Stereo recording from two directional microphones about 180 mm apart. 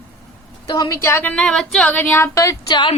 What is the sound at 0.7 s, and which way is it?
A woman's voice, 20° left (ahead or behind).